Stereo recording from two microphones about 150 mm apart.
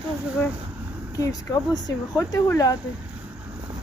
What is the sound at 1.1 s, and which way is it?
Speech, 25° left (ahead or behind).